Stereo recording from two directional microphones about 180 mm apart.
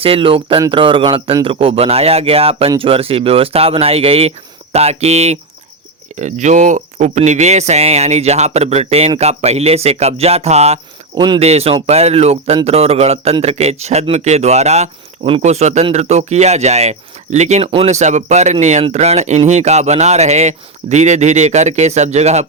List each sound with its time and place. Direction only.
0.0 s a man's voice: 30° right (ahead or behind)